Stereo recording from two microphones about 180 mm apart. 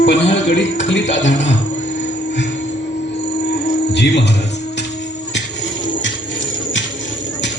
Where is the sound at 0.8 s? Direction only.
80° left.